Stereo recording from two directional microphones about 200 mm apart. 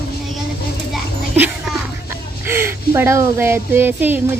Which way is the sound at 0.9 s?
5° right (ahead or behind).